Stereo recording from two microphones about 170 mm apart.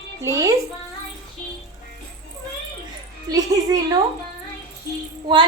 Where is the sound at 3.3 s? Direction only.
20° right (ahead or behind).